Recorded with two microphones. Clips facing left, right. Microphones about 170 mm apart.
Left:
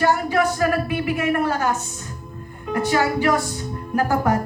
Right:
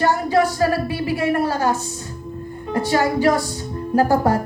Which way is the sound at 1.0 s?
30° right (ahead or behind).